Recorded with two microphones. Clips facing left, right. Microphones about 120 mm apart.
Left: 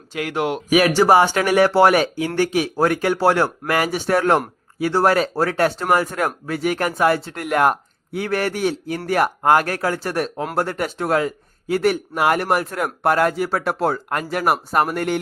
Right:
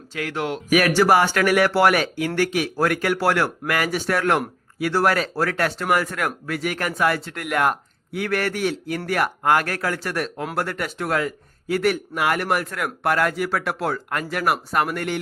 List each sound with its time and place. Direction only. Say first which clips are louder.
0.2 s a man's voice: left 4 dB; 20° left (ahead or behind); by 15.2 s 45° left (ahead or behind)